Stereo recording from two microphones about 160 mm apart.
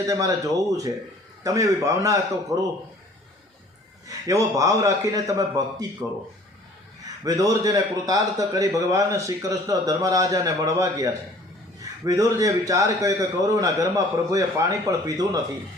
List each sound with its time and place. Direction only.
0.1 s a man's voice: 20° right (ahead or behind)
4.0 s a man's voice: 20° right (ahead or behind)
7.3 s a man's voice: 20° right (ahead or behind)